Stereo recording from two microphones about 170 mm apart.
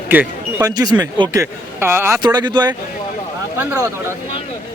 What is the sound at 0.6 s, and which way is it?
Speech, 20° right (ahead or behind).